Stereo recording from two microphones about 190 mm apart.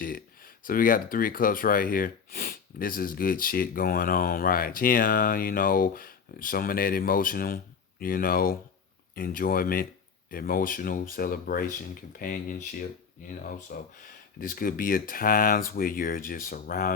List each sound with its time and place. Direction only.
0.0 s speech: 50° left (ahead or behind)